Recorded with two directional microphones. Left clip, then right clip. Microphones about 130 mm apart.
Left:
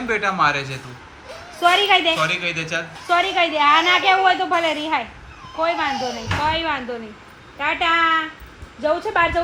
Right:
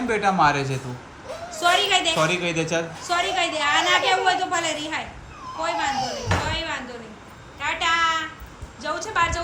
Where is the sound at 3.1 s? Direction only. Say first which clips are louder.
Left 5 dB; 30° left (ahead or behind).